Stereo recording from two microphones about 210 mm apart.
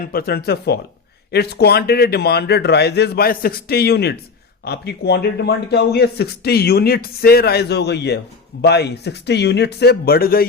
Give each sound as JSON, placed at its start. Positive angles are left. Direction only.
{"t": 0.1, "sound": "speech", "side_deg": 45}